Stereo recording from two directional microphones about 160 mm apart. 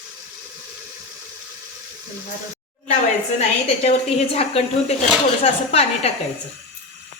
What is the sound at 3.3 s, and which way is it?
A woman's voice, 40° left (ahead or behind).